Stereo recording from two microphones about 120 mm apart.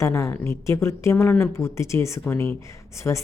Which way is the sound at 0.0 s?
25° left (ahead or behind).